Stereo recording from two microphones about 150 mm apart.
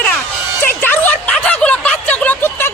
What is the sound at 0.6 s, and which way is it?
Music, 10° left (ahead or behind).